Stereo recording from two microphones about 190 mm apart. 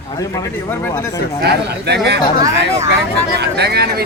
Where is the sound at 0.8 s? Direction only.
15° left (ahead or behind).